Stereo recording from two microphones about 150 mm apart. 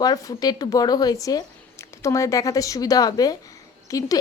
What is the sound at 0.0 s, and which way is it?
Speech, 25° left (ahead or behind).